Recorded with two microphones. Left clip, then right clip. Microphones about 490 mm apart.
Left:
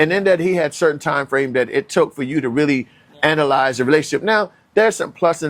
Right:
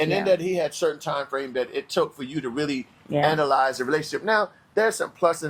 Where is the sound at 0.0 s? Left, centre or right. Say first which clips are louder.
Left 7 dB; left.